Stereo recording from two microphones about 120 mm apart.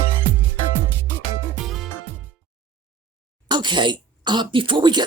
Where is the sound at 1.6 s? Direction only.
Centre (ahead or behind).